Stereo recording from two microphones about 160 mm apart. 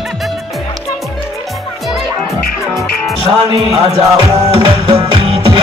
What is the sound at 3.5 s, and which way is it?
Music, 35° right (ahead or behind).